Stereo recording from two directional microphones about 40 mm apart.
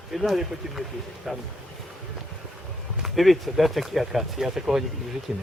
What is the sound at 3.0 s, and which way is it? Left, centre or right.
Speech, centre.